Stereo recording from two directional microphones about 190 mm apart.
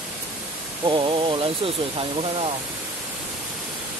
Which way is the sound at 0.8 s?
25° right (ahead or behind).